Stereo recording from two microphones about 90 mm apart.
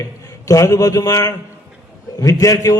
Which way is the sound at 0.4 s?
35° left (ahead or behind).